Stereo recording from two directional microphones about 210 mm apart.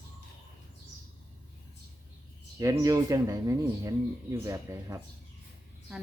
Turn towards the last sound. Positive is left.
turn(degrees=-15)  # may be behind; listen again after turning